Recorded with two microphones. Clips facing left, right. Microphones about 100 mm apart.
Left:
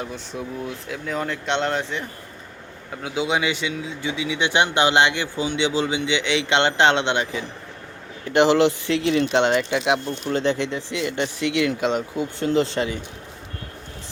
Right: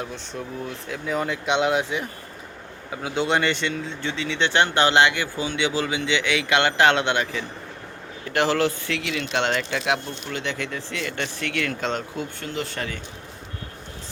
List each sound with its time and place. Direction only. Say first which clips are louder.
0.0 s speech: left 2 dB; 5° left (ahead or behind); by 9.4 s 30° left (ahead or behind)
9.4 s speech: left 5 dB; 20° left (ahead or behind)
10.1 s speech: left 8 dB; 35° left (ahead or behind); by 12.3 s 5° left (ahead or behind)
12.4 s speech: left 13 dB; 25° left (ahead or behind)